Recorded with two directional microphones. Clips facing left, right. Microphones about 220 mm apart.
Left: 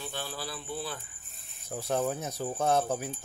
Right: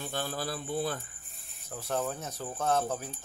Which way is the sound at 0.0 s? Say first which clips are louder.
Right 3 dB; 50° right (ahead or behind).